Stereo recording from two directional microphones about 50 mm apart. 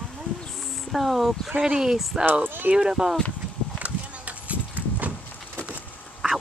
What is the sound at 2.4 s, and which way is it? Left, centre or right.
Speech, right.